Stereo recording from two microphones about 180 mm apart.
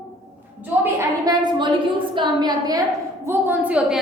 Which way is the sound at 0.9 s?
20° right (ahead or behind).